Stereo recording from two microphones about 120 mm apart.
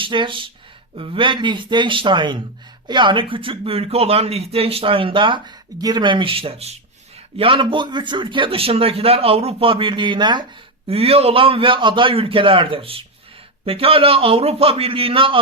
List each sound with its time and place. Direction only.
0.0 s speech: 45° right (ahead or behind)
10.8 s speech: 55° right (ahead or behind)